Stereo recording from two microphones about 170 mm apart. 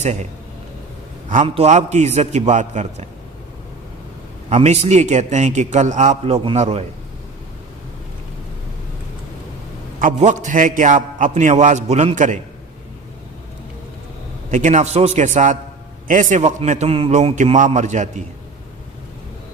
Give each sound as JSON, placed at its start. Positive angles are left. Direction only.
{"t": 1.5, "sound": "a man's voice", "side_deg": -40}
{"t": 4.4, "sound": "a man's voice", "side_deg": -40}
{"t": 10.0, "sound": "a man's voice", "side_deg": -45}
{"t": 14.5, "sound": "a man's voice", "side_deg": -45}